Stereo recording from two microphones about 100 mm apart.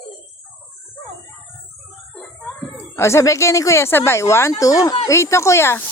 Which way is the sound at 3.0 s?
30° left (ahead or behind).